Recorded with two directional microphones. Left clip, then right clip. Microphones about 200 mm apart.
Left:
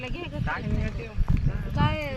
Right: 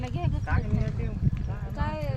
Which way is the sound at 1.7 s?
40° left (ahead or behind).